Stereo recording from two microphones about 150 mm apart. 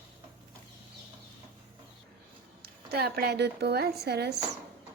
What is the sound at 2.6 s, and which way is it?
A woman's voice, 90° right.